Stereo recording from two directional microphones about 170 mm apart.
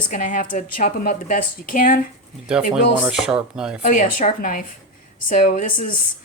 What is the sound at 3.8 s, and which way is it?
Speech, 50° left (ahead or behind).